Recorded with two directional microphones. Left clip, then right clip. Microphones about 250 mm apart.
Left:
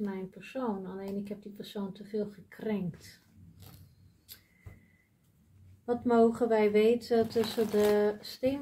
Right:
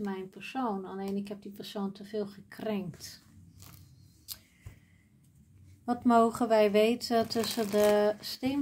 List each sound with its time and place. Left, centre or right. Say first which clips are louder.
0.0 s speech: right 1 dB; right
5.9 s speech: right 1 dB; right